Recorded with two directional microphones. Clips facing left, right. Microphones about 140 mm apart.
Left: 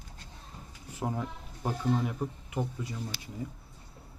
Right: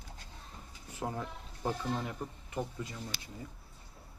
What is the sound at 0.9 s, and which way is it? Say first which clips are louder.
Speech: left 3 dB; 10° left (ahead or behind).